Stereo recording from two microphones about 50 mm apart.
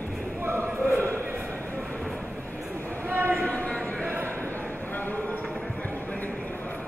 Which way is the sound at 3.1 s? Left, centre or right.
Right.